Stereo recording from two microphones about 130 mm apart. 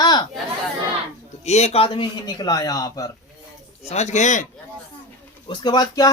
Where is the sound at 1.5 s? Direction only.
55° left (ahead or behind); by 3.1 s 30° left (ahead or behind).